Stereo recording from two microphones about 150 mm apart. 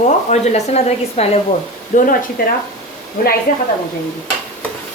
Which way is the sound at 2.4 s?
75° left (ahead or behind).